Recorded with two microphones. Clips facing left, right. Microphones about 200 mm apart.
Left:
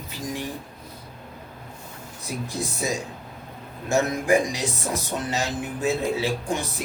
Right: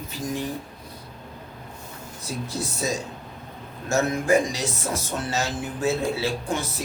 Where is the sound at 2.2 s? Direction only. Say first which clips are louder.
Even; 15° left (ahead or behind).